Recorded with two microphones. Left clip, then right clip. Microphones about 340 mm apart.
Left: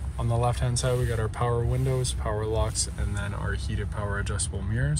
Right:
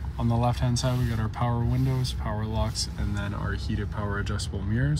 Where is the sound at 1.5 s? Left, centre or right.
Left.